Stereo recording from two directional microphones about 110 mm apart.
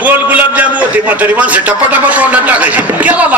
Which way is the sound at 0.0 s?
15° right (ahead or behind).